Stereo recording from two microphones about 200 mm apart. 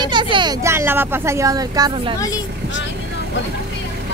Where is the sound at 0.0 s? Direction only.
20° right (ahead or behind).